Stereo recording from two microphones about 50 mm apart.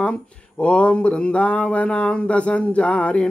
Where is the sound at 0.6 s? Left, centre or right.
Left.